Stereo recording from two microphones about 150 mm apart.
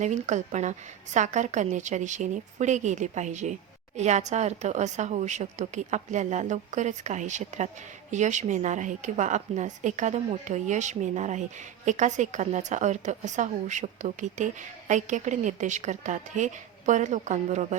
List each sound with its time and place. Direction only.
0.0 s a woman's voice: 50° right (ahead or behind)